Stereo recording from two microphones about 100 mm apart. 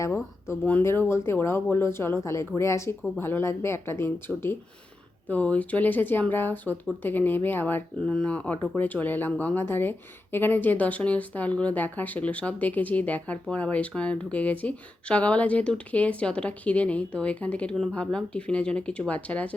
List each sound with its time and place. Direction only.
0.6 s speech: 20° left (ahead or behind)
8.0 s speech: 10° left (ahead or behind)